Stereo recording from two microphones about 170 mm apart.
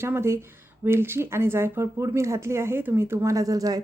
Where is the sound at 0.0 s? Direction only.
15° right (ahead or behind).